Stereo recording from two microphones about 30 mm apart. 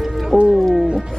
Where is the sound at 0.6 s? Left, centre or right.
Centre.